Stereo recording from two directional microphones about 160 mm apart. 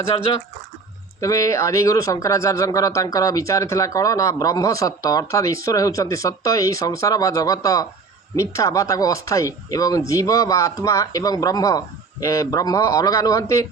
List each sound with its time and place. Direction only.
0.1 s speech: 30° left (ahead or behind)
1.2 s speech: 20° left (ahead or behind)